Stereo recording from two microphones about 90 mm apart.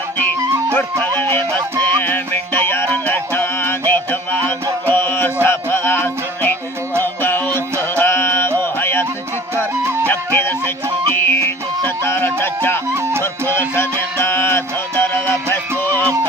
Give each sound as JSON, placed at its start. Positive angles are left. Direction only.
{"t": 1.8, "sound": "music", "side_deg": 25}
{"t": 9.8, "sound": "music", "side_deg": -30}
{"t": 10.1, "sound": "music", "side_deg": 25}
{"t": 12.9, "sound": "music", "side_deg": -30}
{"t": 13.5, "sound": "music", "side_deg": 25}